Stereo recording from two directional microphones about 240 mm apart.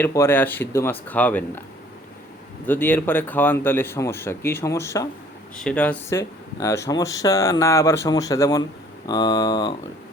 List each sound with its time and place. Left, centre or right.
0.0 s speech: centre
2.6 s speech: centre